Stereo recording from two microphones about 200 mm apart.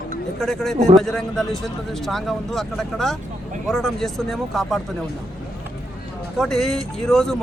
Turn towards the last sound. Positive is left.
turn(degrees=0)  # may be behind; listen again after turning